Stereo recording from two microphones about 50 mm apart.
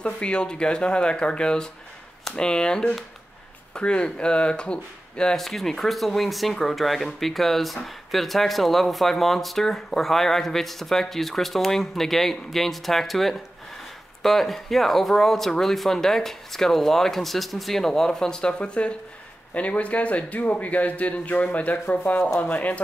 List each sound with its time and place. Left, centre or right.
0.0 s a man's voice: left
5.4 s a man's voice: centre; by 22.8 s left